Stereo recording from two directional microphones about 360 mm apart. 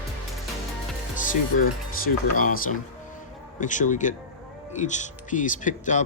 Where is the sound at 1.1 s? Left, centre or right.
Left.